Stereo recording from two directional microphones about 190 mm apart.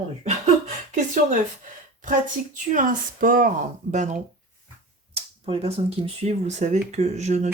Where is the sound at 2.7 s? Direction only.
45° right (ahead or behind).